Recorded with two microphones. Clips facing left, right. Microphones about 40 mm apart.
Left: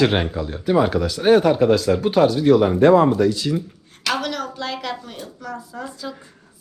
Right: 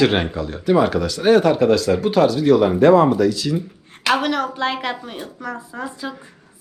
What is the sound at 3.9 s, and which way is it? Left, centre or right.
A woman's voice, right.